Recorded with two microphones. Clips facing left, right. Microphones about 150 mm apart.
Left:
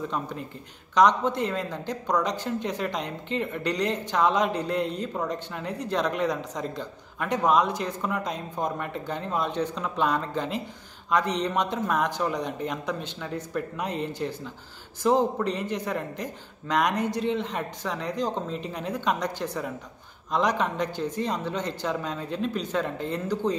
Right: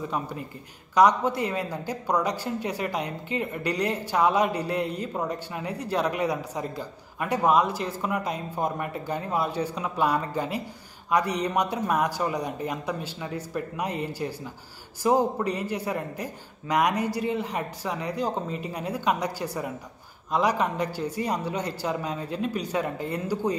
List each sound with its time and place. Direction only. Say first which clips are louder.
0.1 s speech: right 1 dB; 10° right (ahead or behind)